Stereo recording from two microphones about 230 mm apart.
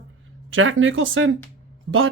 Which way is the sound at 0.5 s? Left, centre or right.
Right.